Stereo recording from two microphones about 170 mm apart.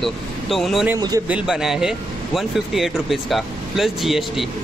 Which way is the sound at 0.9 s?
20° right (ahead or behind).